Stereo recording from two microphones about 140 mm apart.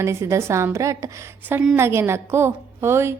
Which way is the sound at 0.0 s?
20° right (ahead or behind).